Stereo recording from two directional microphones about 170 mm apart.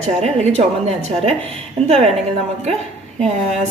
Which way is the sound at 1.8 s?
40° right (ahead or behind).